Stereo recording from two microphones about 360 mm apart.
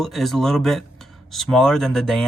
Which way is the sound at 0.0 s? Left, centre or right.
Centre.